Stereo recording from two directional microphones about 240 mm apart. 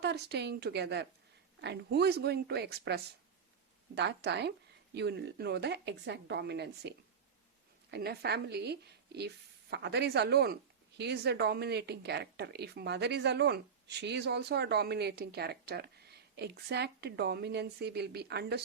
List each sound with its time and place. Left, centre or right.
0.0 s speech: right